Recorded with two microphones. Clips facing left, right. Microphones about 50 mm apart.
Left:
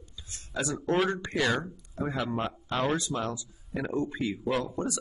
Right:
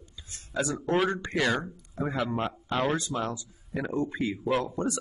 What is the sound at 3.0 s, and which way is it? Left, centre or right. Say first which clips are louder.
Speech: right 1 dB; right.